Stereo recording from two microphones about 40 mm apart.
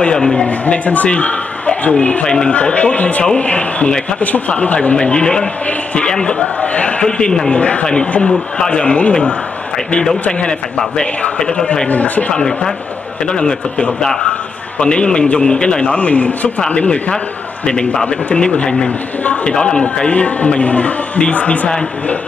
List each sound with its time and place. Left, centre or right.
0.0 s speech: centre
0.5 s a man's voice: left
2.2 s speech: centre
2.5 s speech: left
6.6 s speech: left
7.0 s speech: left
10.4 s speech: centre
11.9 s speech: left
12.3 s speech: centre
16.0 s speech: left